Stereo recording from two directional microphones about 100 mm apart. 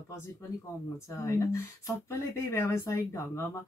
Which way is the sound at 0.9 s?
30° left (ahead or behind).